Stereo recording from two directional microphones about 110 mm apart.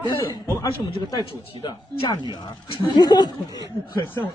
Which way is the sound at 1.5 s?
60° right (ahead or behind).